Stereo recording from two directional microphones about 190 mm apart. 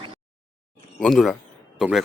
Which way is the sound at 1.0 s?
Centre (ahead or behind).